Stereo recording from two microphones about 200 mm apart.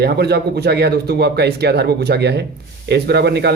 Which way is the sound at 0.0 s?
55° right (ahead or behind).